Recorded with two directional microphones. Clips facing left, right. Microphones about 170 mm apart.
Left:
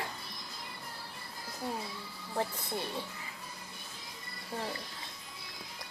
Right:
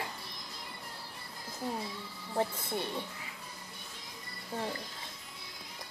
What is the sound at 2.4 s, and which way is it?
Speech, 20° right (ahead or behind).